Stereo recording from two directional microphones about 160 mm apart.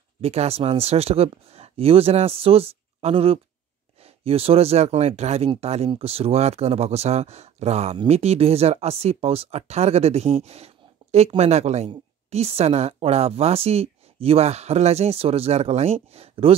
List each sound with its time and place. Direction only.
0.2 s speech: 40° right (ahead or behind)